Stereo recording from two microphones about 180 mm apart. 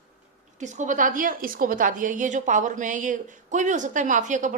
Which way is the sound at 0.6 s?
45° right (ahead or behind).